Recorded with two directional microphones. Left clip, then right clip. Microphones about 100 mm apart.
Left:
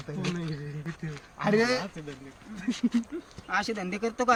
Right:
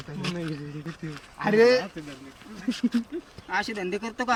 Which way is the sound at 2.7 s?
45° right (ahead or behind).